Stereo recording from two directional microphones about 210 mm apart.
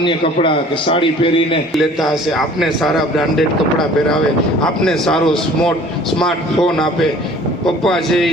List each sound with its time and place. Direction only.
0.0 s a man's voice: 25° left (ahead or behind)
1.7 s a man's voice: centre (ahead or behind)